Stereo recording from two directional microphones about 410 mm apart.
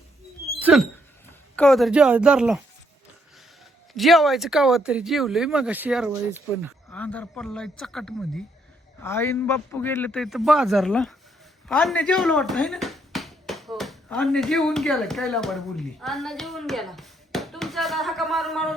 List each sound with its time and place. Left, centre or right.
0.6 s a sound: centre
1.5 s speech: centre
3.9 s speech: centre